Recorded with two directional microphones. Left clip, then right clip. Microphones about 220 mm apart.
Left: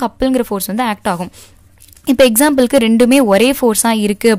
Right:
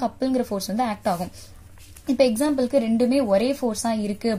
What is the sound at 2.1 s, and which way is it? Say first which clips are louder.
Speech: left 10 dB; 90° left.